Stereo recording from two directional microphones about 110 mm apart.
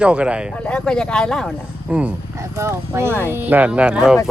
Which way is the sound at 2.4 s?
25° right (ahead or behind).